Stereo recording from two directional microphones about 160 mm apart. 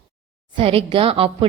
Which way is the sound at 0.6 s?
35° right (ahead or behind).